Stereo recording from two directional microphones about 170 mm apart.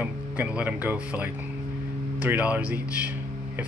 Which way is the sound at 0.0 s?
10° right (ahead or behind).